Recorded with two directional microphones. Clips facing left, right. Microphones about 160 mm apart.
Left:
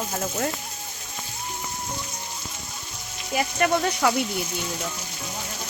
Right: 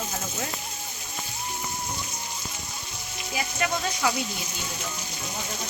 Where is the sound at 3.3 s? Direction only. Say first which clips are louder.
Left 6 dB; 55° left (ahead or behind).